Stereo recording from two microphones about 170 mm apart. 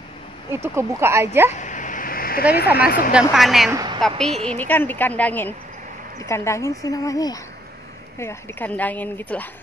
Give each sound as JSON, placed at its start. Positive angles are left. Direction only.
{"t": 0.7, "sound": "speech", "side_deg": -15}
{"t": 1.5, "sound": "a sound", "side_deg": 45}
{"t": 2.5, "sound": "speech", "side_deg": 65}
{"t": 3.1, "sound": "speech", "side_deg": -5}
{"t": 3.7, "sound": "a sound", "side_deg": -25}
{"t": 4.5, "sound": "speech", "side_deg": 10}